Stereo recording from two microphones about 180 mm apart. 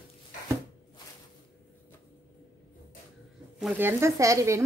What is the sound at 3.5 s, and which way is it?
Speech, 5° right (ahead or behind).